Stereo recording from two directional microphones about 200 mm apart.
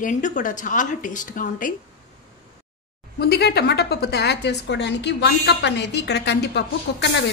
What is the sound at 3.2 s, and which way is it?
A woman's voice, 55° left (ahead or behind).